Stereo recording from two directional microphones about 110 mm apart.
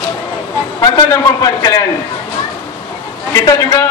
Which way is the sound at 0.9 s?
30° left (ahead or behind).